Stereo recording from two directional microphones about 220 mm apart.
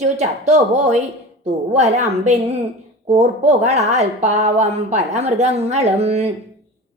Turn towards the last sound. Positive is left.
turn(degrees=-30)  # may be behind; listen again after turning